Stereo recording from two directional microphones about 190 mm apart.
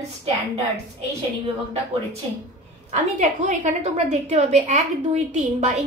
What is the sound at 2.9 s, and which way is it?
A woman's voice, 35° right (ahead or behind).